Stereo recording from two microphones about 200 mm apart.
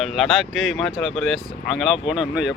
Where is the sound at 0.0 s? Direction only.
Centre (ahead or behind).